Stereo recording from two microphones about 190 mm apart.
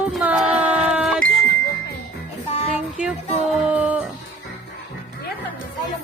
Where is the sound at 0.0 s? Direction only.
5° right (ahead or behind).